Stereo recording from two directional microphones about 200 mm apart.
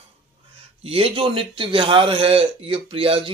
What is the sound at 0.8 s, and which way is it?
A man's voice, 30° right (ahead or behind).